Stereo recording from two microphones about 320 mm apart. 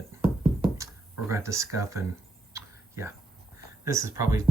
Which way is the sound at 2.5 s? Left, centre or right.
Centre.